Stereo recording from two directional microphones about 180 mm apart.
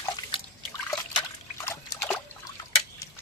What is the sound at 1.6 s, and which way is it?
Trickle, 15° left (ahead or behind).